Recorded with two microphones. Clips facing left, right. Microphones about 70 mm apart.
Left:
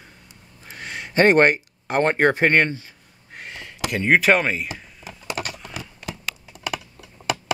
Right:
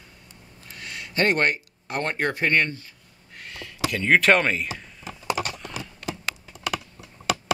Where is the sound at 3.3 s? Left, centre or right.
Left.